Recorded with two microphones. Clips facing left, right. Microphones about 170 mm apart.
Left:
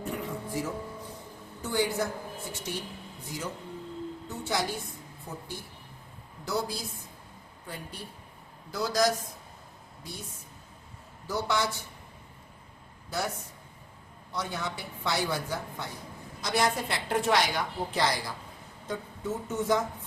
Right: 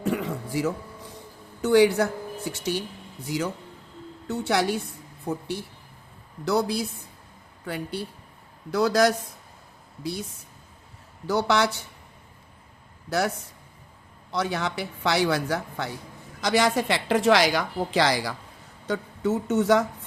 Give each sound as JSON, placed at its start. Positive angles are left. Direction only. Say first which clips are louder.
{"t": 0.0, "sound": "music", "louder": "right 7 dB", "side_deg": -90}
{"t": 1.6, "sound": "speech", "louder": "right 10 dB", "side_deg": -75}
{"t": 4.3, "sound": "a woman's voice", "louder": "right 8 dB", "side_deg": -75}
{"t": 6.4, "sound": "a woman's voice", "louder": "right 8 dB", "side_deg": -70}
{"t": 8.7, "sound": "speech", "louder": "right 6 dB", "side_deg": -65}
{"t": 10.0, "sound": "a woman's voice", "louder": "right 12 dB", "side_deg": -75}
{"t": 11.3, "sound": "a woman's voice", "louder": "right 7 dB", "side_deg": -75}
{"t": 13.1, "sound": "a woman's voice", "louder": "right 7 dB", "side_deg": -75}
{"t": 16.4, "sound": "a woman's voice", "louder": "right 6 dB", "side_deg": -90}
{"t": 18.9, "sound": "a woman's voice", "louder": "right 8 dB", "side_deg": -75}